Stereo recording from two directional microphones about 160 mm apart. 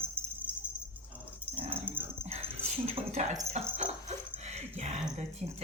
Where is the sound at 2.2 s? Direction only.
40° right (ahead or behind).